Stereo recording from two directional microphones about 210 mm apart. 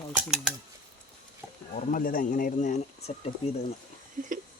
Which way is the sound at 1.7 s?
40° left (ahead or behind).